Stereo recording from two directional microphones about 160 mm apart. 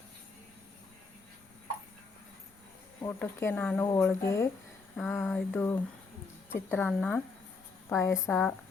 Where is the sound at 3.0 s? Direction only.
15° left (ahead or behind).